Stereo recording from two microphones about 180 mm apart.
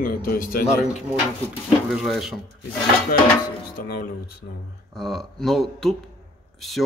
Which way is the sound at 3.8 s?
60° left (ahead or behind).